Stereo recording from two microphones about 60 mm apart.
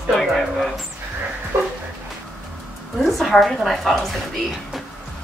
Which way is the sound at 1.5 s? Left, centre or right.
Right.